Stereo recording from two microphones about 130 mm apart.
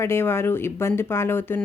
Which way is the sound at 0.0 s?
20° left (ahead or behind).